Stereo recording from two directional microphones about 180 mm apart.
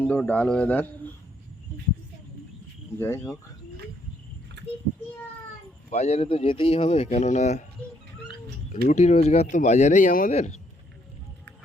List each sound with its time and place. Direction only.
0.0 s speech: 5° left (ahead or behind)
3.0 s speech: 15° left (ahead or behind)
5.9 s speech: 35° left (ahead or behind)
8.9 s speech: 40° left (ahead or behind)